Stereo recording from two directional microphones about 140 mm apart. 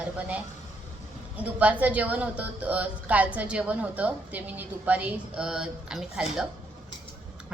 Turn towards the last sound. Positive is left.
turn(degrees=-5)  # may be behind; listen again after turning